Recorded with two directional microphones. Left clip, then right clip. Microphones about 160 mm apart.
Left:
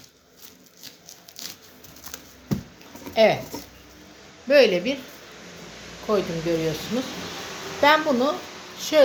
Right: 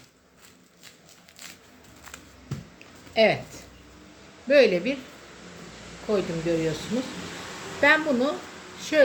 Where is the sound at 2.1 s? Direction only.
20° left (ahead or behind).